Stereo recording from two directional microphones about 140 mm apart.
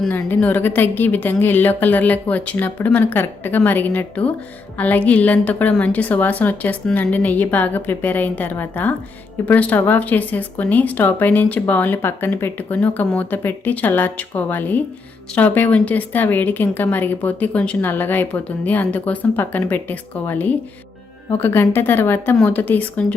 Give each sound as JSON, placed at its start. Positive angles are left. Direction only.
{"t": 0.1, "sound": "speech", "side_deg": 10}